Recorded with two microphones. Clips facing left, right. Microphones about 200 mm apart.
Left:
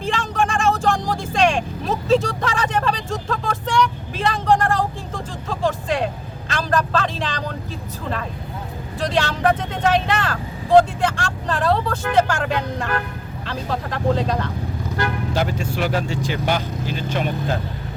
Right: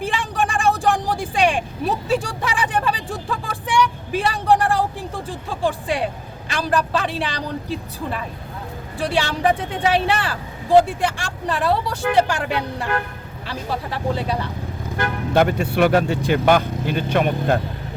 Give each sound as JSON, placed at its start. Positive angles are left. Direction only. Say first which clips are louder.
{"t": 0.0, "sound": "vehicle", "louder": "left 1 dB", "side_deg": -10}
{"t": 5.5, "sound": "music", "louder": "left 1 dB", "side_deg": -10}
{"t": 6.5, "sound": "speech", "louder": "even", "side_deg": -10}
{"t": 15.3, "sound": "speech", "louder": "right 5 dB", "side_deg": -60}